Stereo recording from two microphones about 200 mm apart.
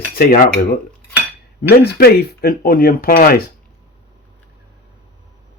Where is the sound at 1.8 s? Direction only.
50° left (ahead or behind).